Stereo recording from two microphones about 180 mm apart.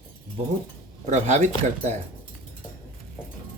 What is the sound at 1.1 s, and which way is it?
Speech, 40° right (ahead or behind).